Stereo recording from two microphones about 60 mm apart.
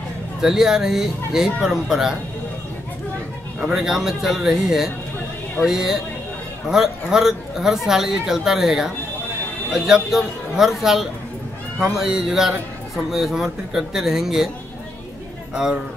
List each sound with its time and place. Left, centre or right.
0.4 s a man's voice: centre
3.6 s a man's voice: centre
15.5 s a man's voice: centre